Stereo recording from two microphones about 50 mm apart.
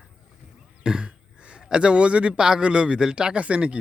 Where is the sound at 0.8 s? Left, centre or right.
Centre.